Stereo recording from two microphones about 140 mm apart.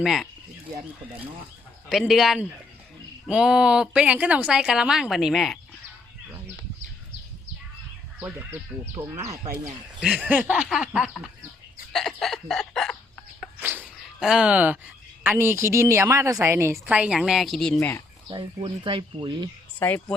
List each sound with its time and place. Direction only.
0.0 s speech: centre (ahead or behind)
1.9 s speech: centre (ahead or behind)
9.0 s speech: 20° right (ahead or behind)
10.0 s a sound: 5° right (ahead or behind)
10.5 s speech: 5° right (ahead or behind)
11.9 s a sound: centre (ahead or behind)
13.6 s bird: 15° right (ahead or behind)
13.9 s speech: 5° right (ahead or behind)
17.7 s speech: 15° left (ahead or behind)
18.3 s speech: 35° right (ahead or behind)
19.8 s speech: 15° left (ahead or behind)